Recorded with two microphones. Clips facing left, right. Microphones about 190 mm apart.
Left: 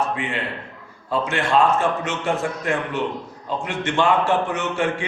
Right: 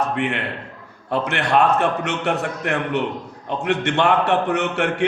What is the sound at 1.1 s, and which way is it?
A man's voice, 65° right (ahead or behind).